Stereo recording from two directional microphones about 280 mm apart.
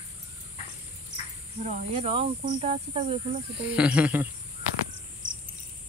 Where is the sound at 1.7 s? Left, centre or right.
Right.